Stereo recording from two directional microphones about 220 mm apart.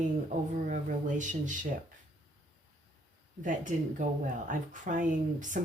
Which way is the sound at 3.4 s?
35° right (ahead or behind).